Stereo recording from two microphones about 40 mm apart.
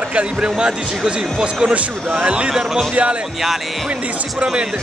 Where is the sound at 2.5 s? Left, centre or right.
Centre.